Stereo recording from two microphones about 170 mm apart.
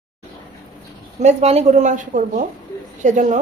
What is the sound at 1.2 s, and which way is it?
A woman's voice, 40° right (ahead or behind).